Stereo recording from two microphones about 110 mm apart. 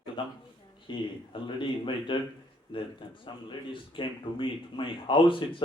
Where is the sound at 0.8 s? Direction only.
50° left (ahead or behind).